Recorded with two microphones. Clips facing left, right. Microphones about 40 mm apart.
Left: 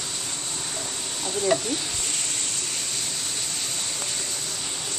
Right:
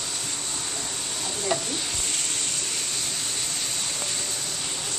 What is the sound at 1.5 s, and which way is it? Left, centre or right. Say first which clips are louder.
Speech: left 3 dB; centre.